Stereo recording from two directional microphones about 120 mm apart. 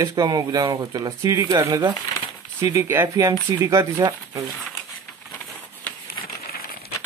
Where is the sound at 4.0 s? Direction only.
35° right (ahead or behind).